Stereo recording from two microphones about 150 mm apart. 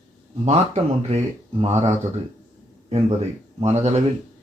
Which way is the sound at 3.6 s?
50° right (ahead or behind).